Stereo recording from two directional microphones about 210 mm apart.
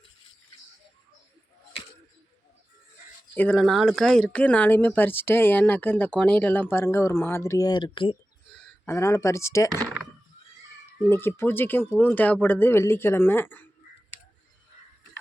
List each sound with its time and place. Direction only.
3.3 s speech: 5° left (ahead or behind); by 8.2 s 25° left (ahead or behind)
8.5 s speech: 10° left (ahead or behind)
11.1 s speech: 10° left (ahead or behind)